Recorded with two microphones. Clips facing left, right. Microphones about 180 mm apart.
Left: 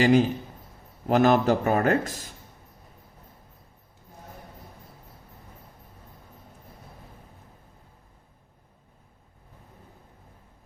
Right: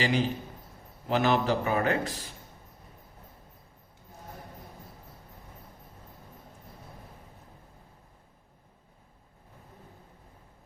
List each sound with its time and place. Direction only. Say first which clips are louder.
0.0 s a man's voice: left 8 dB; 45° left (ahead or behind)